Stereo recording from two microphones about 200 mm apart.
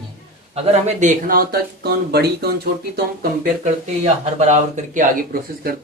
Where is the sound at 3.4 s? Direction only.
35° right (ahead or behind).